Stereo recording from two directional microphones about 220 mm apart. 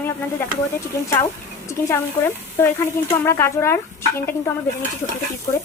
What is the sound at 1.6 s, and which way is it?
Speech, 10° left (ahead or behind).